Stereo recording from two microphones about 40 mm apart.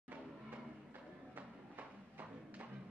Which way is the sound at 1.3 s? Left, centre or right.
Right.